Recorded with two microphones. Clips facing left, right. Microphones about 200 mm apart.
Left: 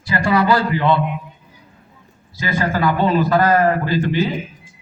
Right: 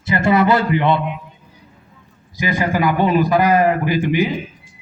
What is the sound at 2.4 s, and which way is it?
A man's voice, 15° right (ahead or behind).